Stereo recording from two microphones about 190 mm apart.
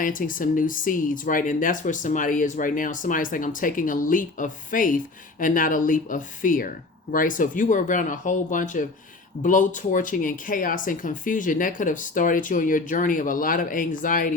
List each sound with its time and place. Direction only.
0.0 s speech: 45° left (ahead or behind)